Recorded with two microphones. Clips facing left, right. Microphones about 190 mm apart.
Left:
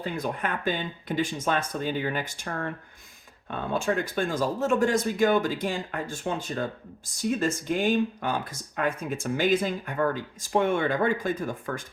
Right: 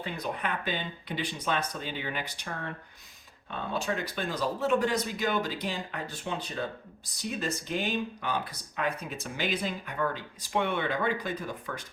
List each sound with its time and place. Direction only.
0.0 s speech: 45° left (ahead or behind)